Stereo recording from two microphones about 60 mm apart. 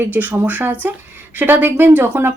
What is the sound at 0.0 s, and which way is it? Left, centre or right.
Speech, right.